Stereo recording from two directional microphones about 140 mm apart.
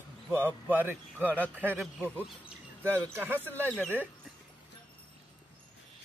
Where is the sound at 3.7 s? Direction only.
10° left (ahead or behind).